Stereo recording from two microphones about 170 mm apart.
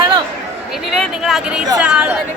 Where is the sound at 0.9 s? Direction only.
Centre (ahead or behind).